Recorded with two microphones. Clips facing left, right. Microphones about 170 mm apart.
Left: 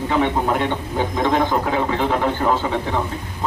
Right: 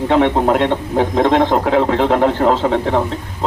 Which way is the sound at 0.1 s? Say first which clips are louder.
Right 6 dB; 80° right.